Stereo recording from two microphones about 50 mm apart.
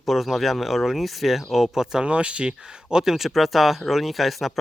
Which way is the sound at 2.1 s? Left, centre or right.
Right.